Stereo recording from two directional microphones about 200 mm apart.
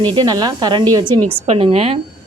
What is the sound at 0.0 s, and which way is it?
A woman's voice, 20° right (ahead or behind).